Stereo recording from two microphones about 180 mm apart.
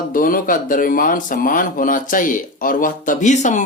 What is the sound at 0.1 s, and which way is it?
Speech, 50° left (ahead or behind).